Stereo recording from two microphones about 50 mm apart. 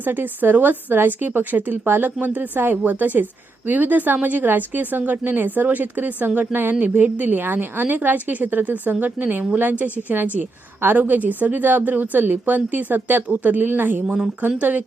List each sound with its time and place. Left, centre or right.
0.0 s a woman's voice: right